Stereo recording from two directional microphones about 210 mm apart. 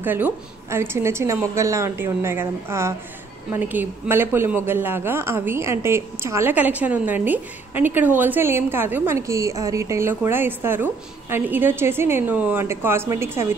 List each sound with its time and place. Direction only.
0.0 s a woman's voice: 10° right (ahead or behind)